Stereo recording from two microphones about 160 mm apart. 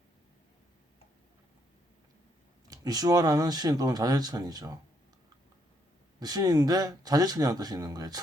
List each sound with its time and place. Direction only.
2.6 s speech: 25° right (ahead or behind)
6.1 s speech: 25° right (ahead or behind)